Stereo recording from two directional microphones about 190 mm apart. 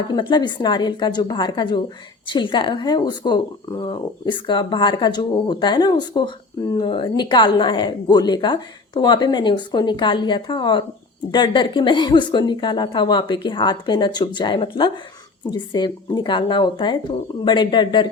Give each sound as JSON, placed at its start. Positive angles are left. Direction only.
{"t": 0.1, "sound": "speech", "side_deg": 25}